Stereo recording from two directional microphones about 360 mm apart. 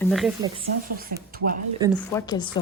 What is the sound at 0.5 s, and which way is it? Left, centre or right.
Speech, right.